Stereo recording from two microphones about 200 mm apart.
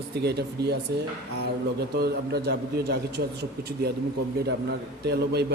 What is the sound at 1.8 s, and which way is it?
Speech, 55° right (ahead or behind).